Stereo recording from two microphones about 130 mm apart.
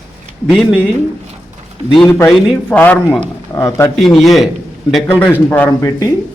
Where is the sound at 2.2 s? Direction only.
10° left (ahead or behind).